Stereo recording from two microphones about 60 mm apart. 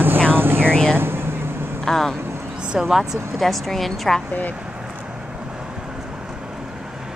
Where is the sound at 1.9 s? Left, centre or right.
Centre.